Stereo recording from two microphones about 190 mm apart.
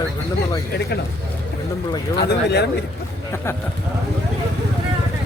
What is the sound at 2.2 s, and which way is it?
Speech, 60° left (ahead or behind).